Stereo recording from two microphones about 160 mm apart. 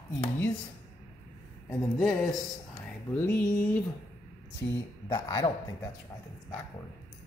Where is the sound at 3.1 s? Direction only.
10° left (ahead or behind).